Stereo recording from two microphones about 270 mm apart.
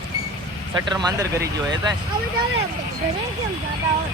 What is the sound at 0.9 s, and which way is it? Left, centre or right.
Speech, centre.